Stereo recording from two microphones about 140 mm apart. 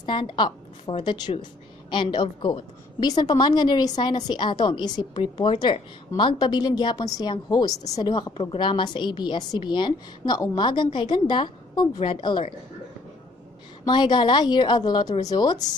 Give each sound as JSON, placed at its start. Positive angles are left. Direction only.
{"t": 0.0, "sound": "a woman's voice", "side_deg": 35}
{"t": 13.8, "sound": "a woman's voice", "side_deg": 30}